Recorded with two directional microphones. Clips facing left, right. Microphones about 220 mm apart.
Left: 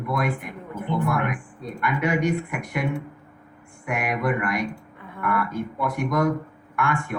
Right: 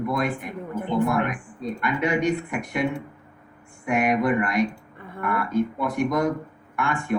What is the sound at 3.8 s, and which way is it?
A man's voice, 25° right (ahead or behind).